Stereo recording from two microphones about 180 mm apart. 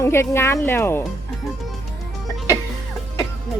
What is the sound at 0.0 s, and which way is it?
Speech, 15° left (ahead or behind).